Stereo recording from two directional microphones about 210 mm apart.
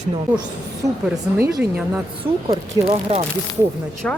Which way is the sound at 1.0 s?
5° right (ahead or behind).